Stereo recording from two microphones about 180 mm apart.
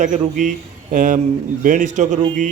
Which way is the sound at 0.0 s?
40° right (ahead or behind).